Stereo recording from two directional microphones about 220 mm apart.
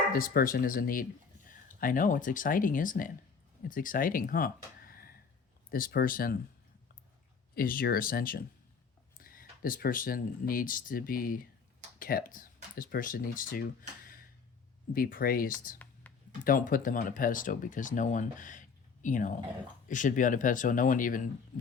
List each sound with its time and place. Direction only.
0.1 s speech: 40° left (ahead or behind)
7.5 s speech: 40° left (ahead or behind)
14.9 s speech: 40° left (ahead or behind)
16.1 s a sound: 5° left (ahead or behind)
16.4 s speech: 40° left (ahead or behind)